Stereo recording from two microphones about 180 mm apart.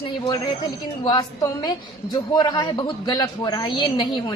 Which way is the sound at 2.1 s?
25° left (ahead or behind).